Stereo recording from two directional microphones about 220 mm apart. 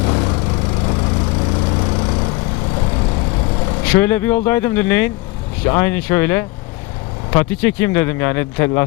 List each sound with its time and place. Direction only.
0.0 s a sound: 20° left (ahead or behind)
0.9 s vehicle: 20° left (ahead or behind)
3.8 s speech: 10° left (ahead or behind)